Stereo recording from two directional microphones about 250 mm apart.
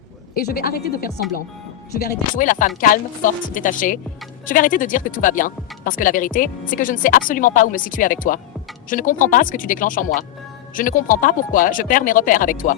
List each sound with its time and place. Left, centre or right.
0.3 s speech: left